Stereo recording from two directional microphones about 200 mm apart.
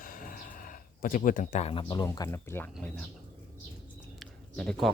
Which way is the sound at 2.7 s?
5° left (ahead or behind).